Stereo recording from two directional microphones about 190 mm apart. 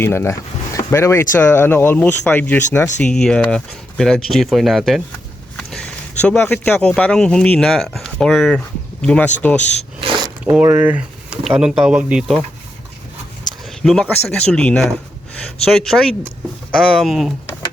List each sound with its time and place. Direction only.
0.0 s speech: 15° left (ahead or behind)
10.0 s mechanisms: 20° right (ahead or behind)
10.4 s speech: 10° right (ahead or behind)
13.8 s speech: 5° left (ahead or behind)